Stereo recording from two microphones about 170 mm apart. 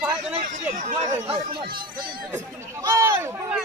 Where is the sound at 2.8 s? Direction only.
15° right (ahead or behind).